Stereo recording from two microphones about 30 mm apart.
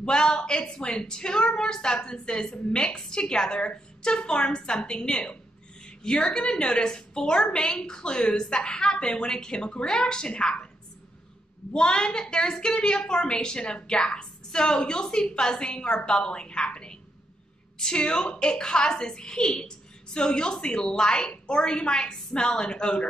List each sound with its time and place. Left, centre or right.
0.0 s a woman's voice: left
11.7 s a woman's voice: left